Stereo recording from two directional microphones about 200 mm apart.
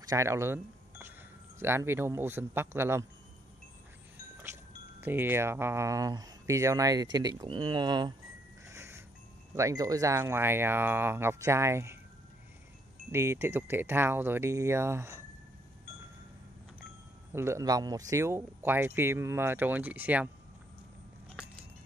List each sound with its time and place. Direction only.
0.1 s speech: 15° right (ahead or behind)
5.0 s speech: 10° right (ahead or behind)
8.6 s music: 15° right (ahead or behind)
9.6 s speech: 15° right (ahead or behind)
13.1 s speech: 15° right (ahead or behind)
17.3 s speech: 15° right (ahead or behind)